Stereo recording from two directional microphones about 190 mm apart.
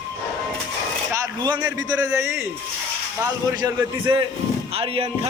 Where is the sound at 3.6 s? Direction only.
25° right (ahead or behind).